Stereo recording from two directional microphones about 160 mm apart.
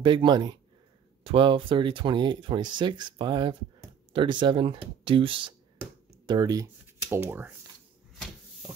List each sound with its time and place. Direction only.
0.0 s speech: 30° right (ahead or behind); by 7.5 s 10° right (ahead or behind)
8.1 s cupboard open or close: centre (ahead or behind)